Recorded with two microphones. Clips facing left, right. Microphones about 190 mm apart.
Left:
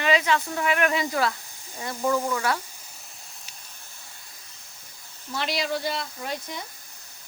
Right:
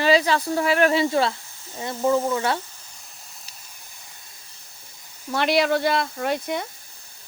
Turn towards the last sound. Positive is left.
turn(degrees=-65)  # may be behind; listen again after turning